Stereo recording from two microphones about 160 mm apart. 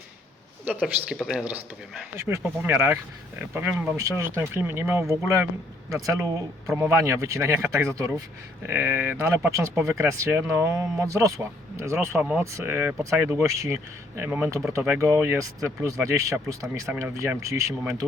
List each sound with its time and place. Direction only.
0.6 s speech: 10° right (ahead or behind)